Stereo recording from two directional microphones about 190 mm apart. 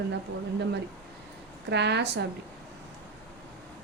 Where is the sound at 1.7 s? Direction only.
65° right (ahead or behind).